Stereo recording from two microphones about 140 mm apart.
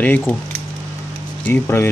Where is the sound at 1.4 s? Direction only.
15° left (ahead or behind).